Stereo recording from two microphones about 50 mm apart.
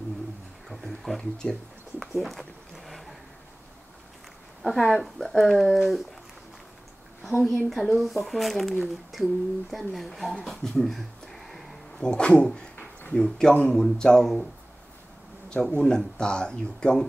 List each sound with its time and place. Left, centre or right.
0.7 s speech: centre
1.4 s a sound: centre
4.6 s speech: centre
7.4 s speech: centre
12.0 s speech: centre
15.5 s speech: centre